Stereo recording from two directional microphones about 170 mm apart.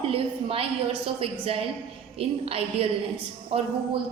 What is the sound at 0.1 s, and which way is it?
A woman's voice, 30° right (ahead or behind).